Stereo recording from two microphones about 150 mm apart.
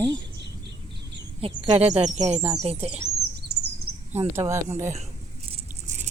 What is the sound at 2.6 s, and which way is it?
Speech, 45° right (ahead or behind).